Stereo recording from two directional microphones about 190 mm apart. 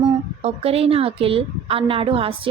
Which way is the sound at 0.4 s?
30° right (ahead or behind).